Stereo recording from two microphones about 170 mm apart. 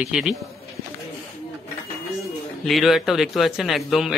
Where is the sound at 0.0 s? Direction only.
Centre (ahead or behind).